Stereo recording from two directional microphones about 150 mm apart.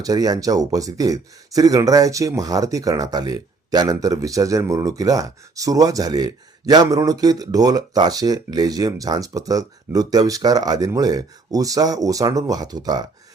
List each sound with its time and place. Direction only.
0.0 s speech: 25° right (ahead or behind)